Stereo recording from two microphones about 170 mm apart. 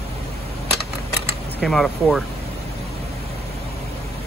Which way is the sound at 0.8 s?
70° right (ahead or behind).